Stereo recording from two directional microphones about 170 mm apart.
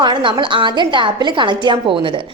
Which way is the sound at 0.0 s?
25° right (ahead or behind).